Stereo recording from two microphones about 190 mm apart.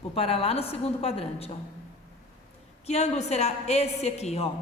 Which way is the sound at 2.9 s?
35° left (ahead or behind).